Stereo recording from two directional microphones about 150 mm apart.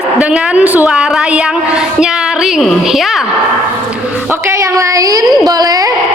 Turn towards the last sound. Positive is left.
turn(degrees=-25)  # may be behind; listen again after turning